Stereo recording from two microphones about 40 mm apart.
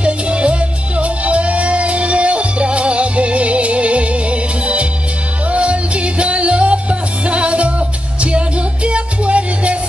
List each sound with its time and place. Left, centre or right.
0.0 s music: right